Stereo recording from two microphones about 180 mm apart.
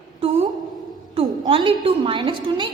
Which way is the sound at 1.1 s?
30° right (ahead or behind).